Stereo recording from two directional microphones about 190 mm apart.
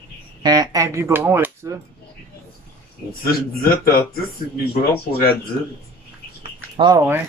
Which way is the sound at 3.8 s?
50° left (ahead or behind).